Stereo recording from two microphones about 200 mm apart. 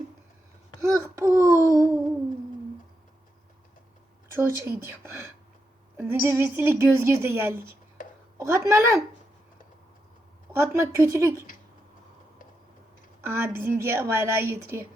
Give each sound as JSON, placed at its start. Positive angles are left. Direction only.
{"t": 0.8, "sound": "a woman's voice", "side_deg": -15}
{"t": 4.4, "sound": "a woman's voice", "side_deg": -10}
{"t": 10.6, "sound": "a woman's voice", "side_deg": -10}
{"t": 13.2, "sound": "a woman's voice", "side_deg": -10}